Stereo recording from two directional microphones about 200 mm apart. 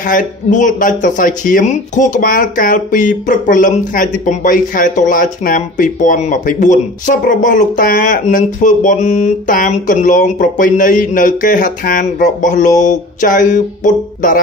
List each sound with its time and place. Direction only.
0.0 s speech: 40° left (ahead or behind)